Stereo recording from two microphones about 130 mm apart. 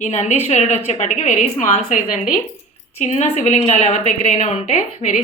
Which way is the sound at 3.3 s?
60° left (ahead or behind).